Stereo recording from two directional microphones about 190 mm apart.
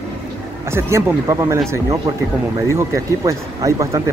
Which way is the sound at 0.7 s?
15° right (ahead or behind).